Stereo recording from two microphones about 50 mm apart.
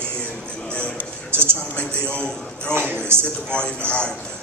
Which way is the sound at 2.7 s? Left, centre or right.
Right.